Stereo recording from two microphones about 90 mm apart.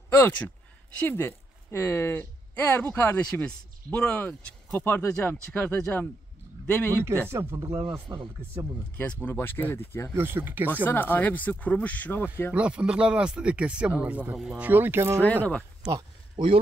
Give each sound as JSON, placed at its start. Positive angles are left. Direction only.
{"t": 0.1, "sound": "speech", "side_deg": 25}
{"t": 4.7, "sound": "speech", "side_deg": 25}
{"t": 7.2, "sound": "speech", "side_deg": -30}
{"t": 8.9, "sound": "speech", "side_deg": 20}
{"t": 10.1, "sound": "speech", "side_deg": -25}
{"t": 10.7, "sound": "speech", "side_deg": 20}
{"t": 12.5, "sound": "speech", "side_deg": -15}
{"t": 15.2, "sound": "speech", "side_deg": 15}
{"t": 15.8, "sound": "speech", "side_deg": -10}